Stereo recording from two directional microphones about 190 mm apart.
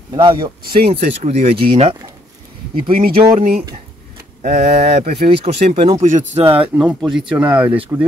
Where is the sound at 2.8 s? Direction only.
50° right (ahead or behind).